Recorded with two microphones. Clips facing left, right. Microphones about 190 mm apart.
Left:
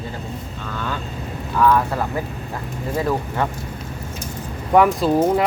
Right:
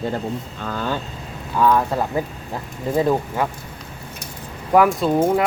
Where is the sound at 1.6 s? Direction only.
15° right (ahead or behind).